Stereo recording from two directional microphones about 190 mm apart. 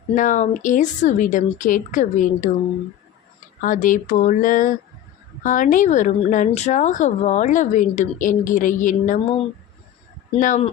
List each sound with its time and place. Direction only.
0.1 s speech: 40° left (ahead or behind)
3.6 s speech: 45° left (ahead or behind)
10.4 s speech: 40° left (ahead or behind)